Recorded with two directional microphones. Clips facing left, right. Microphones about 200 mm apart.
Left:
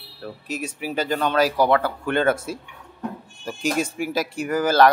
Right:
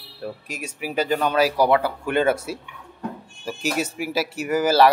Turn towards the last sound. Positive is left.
turn(degrees=-5)  # may be behind; listen again after turning